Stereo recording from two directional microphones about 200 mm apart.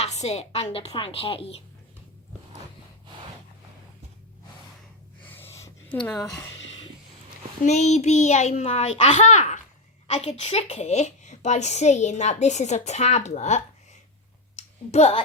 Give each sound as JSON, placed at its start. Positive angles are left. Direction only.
{"t": 0.0, "sound": "speech", "side_deg": 35}
{"t": 5.2, "sound": "a sound", "side_deg": 10}
{"t": 7.6, "sound": "a woman's voice", "side_deg": 35}
{"t": 14.9, "sound": "a woman's voice", "side_deg": 35}